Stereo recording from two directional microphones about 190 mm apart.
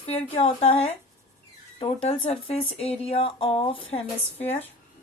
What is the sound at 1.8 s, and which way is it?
Speech, 30° left (ahead or behind).